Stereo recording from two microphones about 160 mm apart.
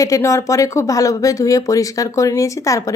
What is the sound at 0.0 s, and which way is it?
Speech, 20° left (ahead or behind).